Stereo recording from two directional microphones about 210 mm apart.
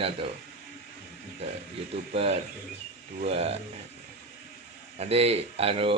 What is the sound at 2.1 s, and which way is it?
A man's voice, 30° right (ahead or behind).